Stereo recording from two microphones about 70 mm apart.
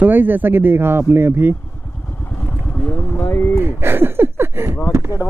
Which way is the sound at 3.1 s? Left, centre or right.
Left.